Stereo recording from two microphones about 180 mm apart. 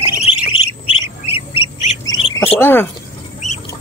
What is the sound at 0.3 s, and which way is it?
Bird, 30° left (ahead or behind).